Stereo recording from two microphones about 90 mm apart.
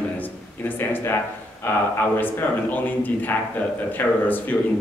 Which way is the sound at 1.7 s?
25° left (ahead or behind).